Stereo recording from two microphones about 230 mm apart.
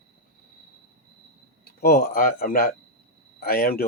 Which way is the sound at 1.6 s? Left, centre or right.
Left.